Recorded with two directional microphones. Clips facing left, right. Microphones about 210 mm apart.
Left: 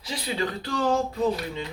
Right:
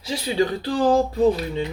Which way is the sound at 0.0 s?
30° right (ahead or behind).